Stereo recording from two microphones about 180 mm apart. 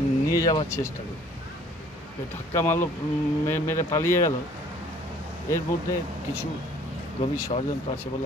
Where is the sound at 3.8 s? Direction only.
15° left (ahead or behind).